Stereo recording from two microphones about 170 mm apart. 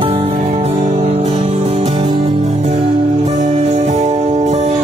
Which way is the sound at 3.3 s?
45° right (ahead or behind).